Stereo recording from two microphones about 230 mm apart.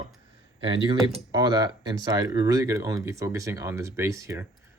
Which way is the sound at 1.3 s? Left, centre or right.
Centre.